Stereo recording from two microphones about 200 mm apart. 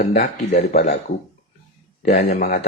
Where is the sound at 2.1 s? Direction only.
45° left (ahead or behind).